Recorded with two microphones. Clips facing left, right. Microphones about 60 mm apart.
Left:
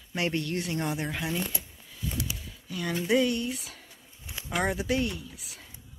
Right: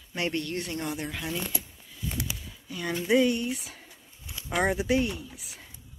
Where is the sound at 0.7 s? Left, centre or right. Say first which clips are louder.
Left 2 dB; centre.